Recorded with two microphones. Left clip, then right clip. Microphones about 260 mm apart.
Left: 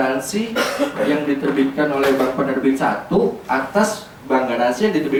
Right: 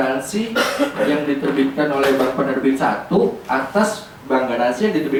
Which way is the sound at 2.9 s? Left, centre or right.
Right.